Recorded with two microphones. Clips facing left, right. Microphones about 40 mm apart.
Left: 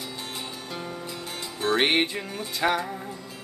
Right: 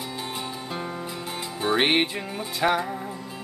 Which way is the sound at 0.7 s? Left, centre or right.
Centre.